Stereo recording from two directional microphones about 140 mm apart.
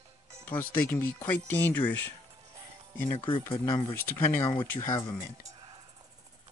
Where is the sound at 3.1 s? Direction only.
35° left (ahead or behind).